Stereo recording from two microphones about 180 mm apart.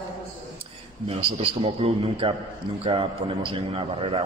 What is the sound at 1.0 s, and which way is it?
A man's voice, 35° right (ahead or behind).